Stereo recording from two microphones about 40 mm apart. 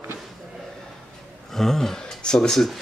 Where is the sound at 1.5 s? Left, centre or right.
Centre.